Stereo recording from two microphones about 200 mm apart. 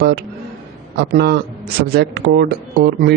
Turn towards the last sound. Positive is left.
turn(degrees=-55)  # may be behind; listen again after turning